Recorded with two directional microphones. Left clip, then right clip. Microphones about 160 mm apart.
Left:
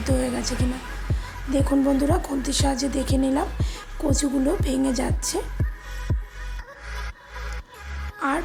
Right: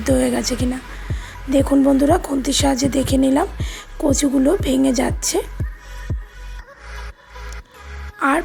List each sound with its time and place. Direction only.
0.0 s speech: 40° right (ahead or behind)